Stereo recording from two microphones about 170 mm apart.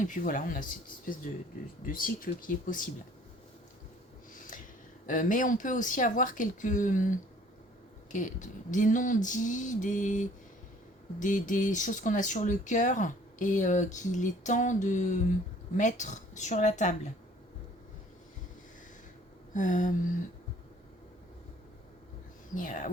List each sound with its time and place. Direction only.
0.0 s speech: 50° left (ahead or behind)
1.8 s speech: 55° left (ahead or behind)
4.4 s a sound: 50° left (ahead or behind)
5.0 s speech: 50° left (ahead or behind)
19.5 s speech: 50° left (ahead or behind)
22.5 s speech: 50° left (ahead or behind)